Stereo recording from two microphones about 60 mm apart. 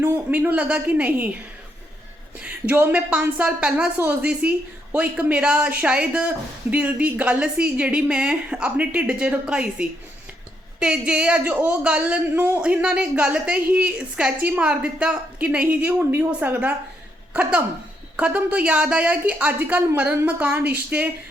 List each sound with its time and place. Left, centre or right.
0.3 s a woman's voice: right
2.4 s a woman's voice: right
12.3 s speech: right
12.6 s a woman's voice: centre
18.2 s a woman's voice: right